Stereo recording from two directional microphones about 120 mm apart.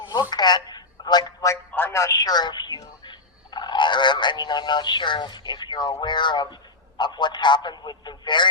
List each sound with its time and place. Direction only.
0.1 s telephone: 35° left (ahead or behind)
1.7 s speech: 20° left (ahead or behind); by 8.4 s 40° left (ahead or behind)